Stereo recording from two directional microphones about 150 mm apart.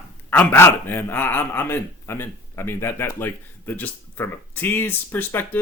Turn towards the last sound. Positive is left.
turn(degrees=15)  # may be behind; listen again after turning